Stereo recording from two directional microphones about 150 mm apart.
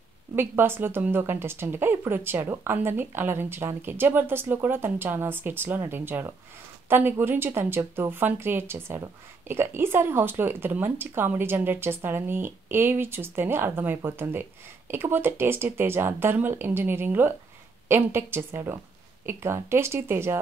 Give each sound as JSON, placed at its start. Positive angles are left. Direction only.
{"t": 0.4, "sound": "speech", "side_deg": -15}